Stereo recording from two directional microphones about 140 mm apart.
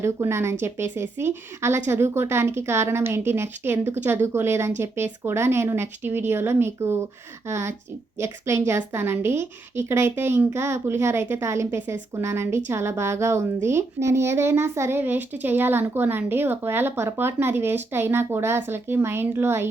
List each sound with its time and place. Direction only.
0.0 s a woman's voice: 20° right (ahead or behind)